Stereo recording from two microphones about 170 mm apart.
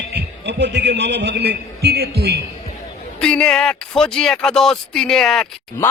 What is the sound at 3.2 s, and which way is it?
Speech, 5° left (ahead or behind).